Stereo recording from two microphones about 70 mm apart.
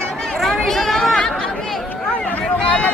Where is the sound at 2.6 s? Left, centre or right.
Centre.